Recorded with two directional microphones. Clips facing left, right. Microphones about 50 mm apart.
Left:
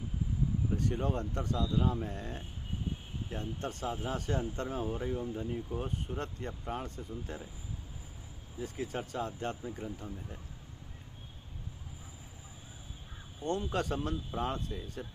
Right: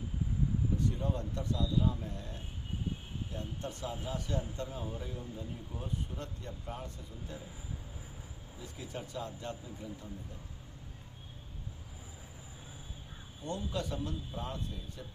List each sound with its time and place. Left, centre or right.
0.8 s speech: left
8.6 s speech: left
13.4 s speech: left